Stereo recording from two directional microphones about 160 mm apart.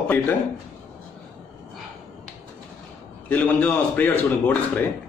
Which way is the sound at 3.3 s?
10° left (ahead or behind).